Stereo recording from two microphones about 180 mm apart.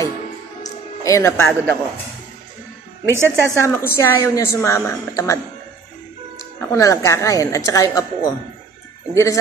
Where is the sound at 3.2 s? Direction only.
10° left (ahead or behind).